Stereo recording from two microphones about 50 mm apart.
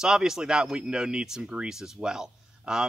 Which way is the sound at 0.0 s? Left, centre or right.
Centre.